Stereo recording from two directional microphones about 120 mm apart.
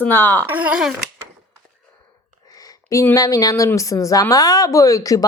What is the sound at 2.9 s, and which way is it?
A woman's voice, 25° left (ahead or behind).